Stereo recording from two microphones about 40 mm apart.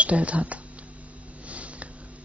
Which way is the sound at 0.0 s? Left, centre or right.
Right.